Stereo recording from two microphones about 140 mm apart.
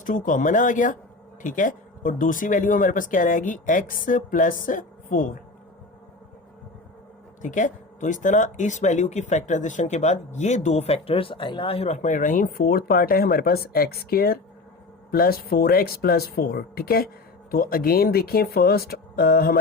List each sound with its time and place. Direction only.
0.0 s speech: 70° left (ahead or behind)
7.4 s speech: 65° left (ahead or behind); by 19.5 s 90° left